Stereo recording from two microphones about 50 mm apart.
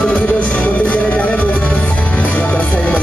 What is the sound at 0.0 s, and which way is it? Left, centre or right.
Music, left.